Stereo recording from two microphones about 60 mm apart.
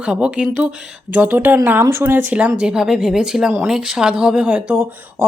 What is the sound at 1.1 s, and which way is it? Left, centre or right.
Speech, right.